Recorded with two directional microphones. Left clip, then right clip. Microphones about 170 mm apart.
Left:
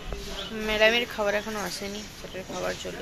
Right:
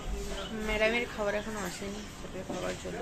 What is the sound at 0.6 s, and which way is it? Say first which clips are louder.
Speech: left 7 dB; 20° left (ahead or behind).